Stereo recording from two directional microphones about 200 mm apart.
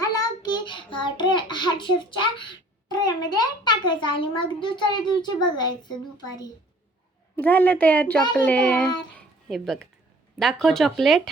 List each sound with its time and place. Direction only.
0.0 s child singing: 20° left (ahead or behind)
2.9 s a child's voice: 20° left (ahead or behind)
9.1 s a sound: centre (ahead or behind)
10.3 s speech: centre (ahead or behind)